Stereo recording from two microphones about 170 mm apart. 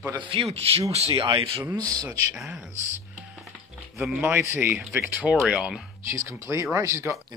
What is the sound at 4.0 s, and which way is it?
Speech, 5° right (ahead or behind).